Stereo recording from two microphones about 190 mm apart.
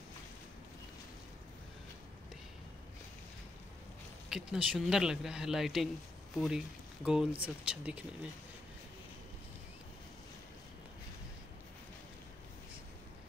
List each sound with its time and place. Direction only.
4.3 s speech: 5° right (ahead or behind)